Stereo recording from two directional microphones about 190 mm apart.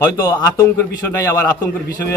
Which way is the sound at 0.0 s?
15° left (ahead or behind).